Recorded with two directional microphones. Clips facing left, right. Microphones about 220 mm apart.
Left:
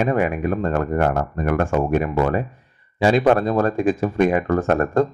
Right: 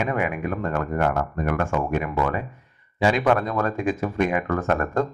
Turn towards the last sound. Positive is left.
turn(degrees=30)  # may be behind; listen again after turning